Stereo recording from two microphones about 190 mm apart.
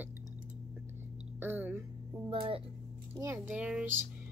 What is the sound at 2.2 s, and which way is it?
Speech, 30° right (ahead or behind).